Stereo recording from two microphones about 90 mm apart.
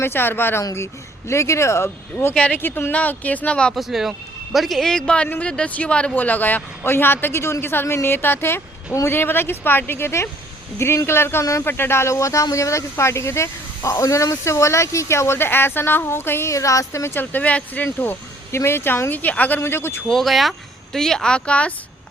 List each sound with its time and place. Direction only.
0.0 s a man's voice: 25° left (ahead or behind)
2.3 s speech: 15° left (ahead or behind)
3.8 s a man's voice: 5° right (ahead or behind); by 17.2 s 30° left (ahead or behind)
17.3 s a man's voice: 15° left (ahead or behind)
20.1 s speech: centre (ahead or behind)